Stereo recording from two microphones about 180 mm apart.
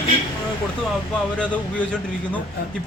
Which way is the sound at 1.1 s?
5° left (ahead or behind).